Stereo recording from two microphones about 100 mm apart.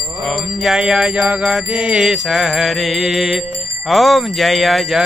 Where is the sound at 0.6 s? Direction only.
5° right (ahead or behind).